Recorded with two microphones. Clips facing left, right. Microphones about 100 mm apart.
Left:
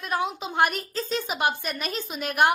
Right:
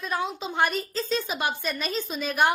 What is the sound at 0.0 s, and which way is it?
A woman's voice, 15° left (ahead or behind).